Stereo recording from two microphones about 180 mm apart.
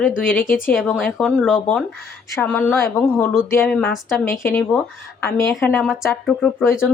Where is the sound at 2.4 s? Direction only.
10° left (ahead or behind).